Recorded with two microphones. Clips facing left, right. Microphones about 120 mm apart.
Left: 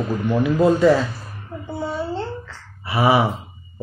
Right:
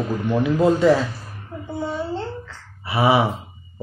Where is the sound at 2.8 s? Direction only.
20° right (ahead or behind).